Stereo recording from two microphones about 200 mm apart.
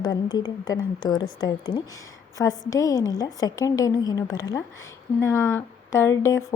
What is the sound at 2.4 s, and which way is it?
A woman's voice, 10° left (ahead or behind).